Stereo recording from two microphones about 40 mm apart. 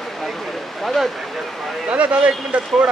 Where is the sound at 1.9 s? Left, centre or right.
Right.